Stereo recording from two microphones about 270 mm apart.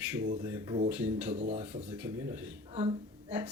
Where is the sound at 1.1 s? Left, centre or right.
Right.